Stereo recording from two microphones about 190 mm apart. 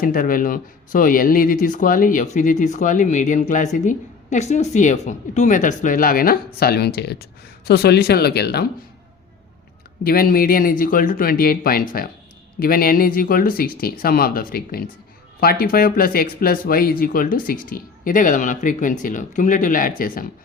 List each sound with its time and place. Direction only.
0.0 s speech: 45° left (ahead or behind)
10.0 s speech: 50° left (ahead or behind)